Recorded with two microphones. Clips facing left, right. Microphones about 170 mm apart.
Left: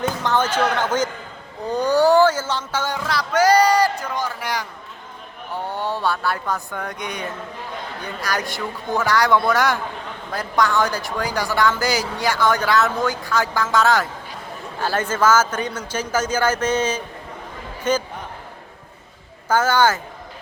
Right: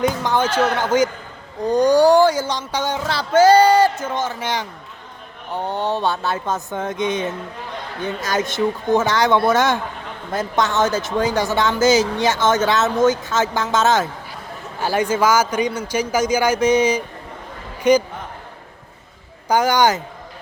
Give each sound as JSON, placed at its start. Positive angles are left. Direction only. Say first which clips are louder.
{"t": 0.0, "sound": "a man's voice", "louder": "right 2 dB", "side_deg": -10}
{"t": 19.5, "sound": "a man's voice", "louder": "right 2 dB", "side_deg": -15}